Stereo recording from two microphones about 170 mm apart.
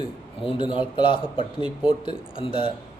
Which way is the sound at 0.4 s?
30° left (ahead or behind).